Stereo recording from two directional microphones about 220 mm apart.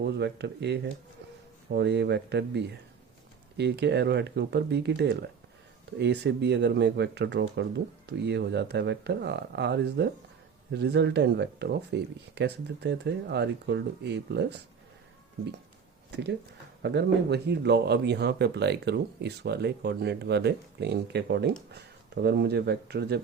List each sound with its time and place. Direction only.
0.0 s speech: 50° right (ahead or behind)
16.8 s speech: 50° right (ahead or behind)